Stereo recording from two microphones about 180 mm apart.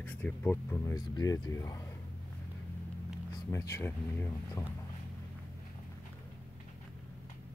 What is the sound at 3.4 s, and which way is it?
Speech, 15° left (ahead or behind).